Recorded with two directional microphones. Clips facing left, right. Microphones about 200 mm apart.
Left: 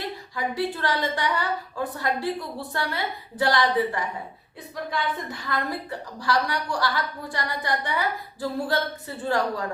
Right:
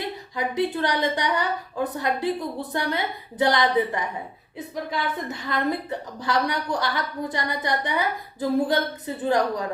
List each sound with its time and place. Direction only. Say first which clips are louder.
0.3 s a woman's voice: right 3 dB; 20° right (ahead or behind)